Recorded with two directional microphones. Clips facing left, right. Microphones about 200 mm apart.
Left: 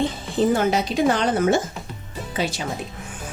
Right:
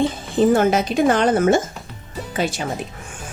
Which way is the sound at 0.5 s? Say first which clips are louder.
Right 4 dB; 50° right (ahead or behind).